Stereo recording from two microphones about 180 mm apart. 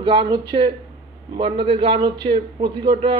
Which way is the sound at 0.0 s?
30° right (ahead or behind).